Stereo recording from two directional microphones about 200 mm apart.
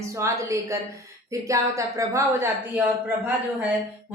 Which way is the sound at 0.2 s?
15° right (ahead or behind).